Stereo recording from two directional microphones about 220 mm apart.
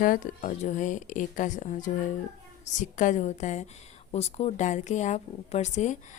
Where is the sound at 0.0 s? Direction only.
35° left (ahead or behind).